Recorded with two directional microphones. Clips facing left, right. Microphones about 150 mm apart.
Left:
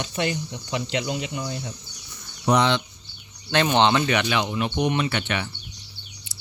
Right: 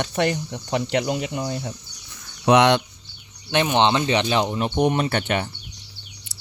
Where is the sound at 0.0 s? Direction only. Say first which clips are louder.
Right 4 dB; 55° right (ahead or behind).